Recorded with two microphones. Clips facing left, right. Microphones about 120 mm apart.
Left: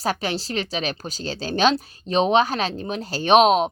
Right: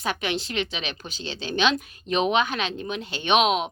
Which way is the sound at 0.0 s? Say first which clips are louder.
Left 3 dB; 35° left (ahead or behind).